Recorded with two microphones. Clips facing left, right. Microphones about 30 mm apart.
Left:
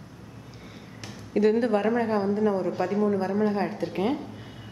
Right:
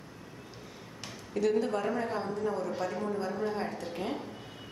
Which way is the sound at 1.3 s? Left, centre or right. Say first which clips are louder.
Left 7 dB; left.